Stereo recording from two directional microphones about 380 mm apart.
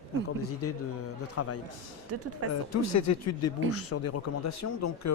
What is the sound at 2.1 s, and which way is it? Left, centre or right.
Speech, right.